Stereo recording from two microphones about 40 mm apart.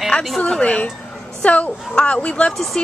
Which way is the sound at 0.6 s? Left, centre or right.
Left.